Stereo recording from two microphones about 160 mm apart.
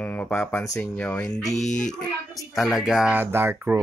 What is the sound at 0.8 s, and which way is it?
Speech, 5° left (ahead or behind).